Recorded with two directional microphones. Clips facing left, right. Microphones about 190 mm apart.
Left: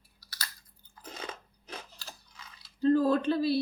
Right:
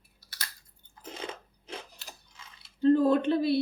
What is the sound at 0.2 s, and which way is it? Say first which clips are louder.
Chewing: left 1 dB; 25° right (ahead or behind).